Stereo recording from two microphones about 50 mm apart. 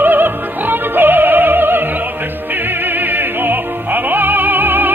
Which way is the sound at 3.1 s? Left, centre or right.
Right.